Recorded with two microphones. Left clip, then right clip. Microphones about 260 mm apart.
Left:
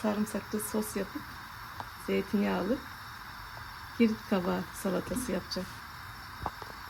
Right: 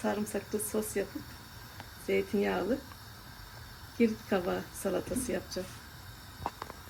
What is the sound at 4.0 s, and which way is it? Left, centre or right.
Speech, left.